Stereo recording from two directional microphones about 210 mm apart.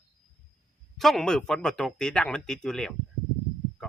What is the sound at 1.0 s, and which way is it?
A man's voice, centre (ahead or behind).